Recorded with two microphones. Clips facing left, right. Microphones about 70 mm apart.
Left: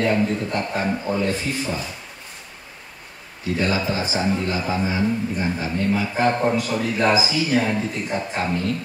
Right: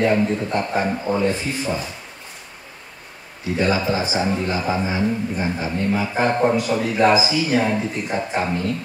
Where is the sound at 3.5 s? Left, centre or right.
Right.